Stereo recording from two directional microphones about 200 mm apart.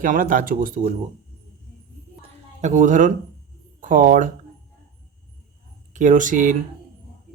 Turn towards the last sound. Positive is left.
turn(degrees=-40)  # may be behind; listen again after turning